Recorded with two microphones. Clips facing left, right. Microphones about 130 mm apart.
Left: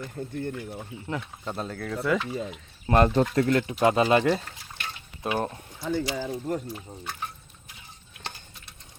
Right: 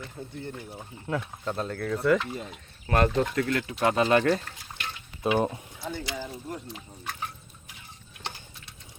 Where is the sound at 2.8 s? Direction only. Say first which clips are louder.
Left 3 dB; 25° left (ahead or behind).